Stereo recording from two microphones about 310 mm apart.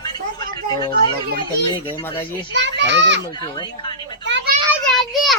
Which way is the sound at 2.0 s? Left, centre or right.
Centre.